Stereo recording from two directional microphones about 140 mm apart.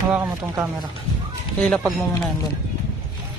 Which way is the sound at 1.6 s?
5° left (ahead or behind).